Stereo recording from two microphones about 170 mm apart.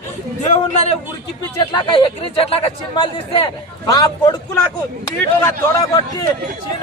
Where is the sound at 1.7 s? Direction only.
30° left (ahead or behind).